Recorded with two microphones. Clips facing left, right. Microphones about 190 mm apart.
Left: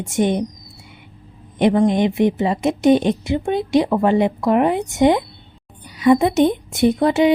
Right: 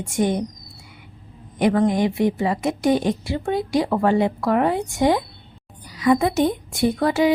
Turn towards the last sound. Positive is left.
turn(degrees=20)  # may be behind; listen again after turning